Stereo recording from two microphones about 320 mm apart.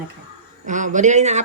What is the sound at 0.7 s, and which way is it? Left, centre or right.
Speech, right.